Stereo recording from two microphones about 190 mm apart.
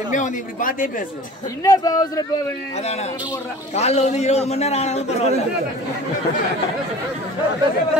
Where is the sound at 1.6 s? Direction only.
20° left (ahead or behind).